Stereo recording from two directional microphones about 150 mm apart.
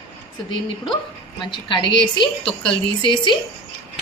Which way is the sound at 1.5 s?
35° left (ahead or behind).